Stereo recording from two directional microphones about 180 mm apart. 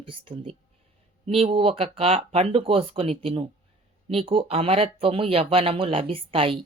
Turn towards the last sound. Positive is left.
turn(degrees=-30)  # may be behind; listen again after turning